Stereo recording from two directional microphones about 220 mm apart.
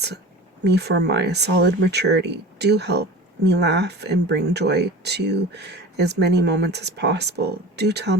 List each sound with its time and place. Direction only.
0.6 s speech: 50° right (ahead or behind)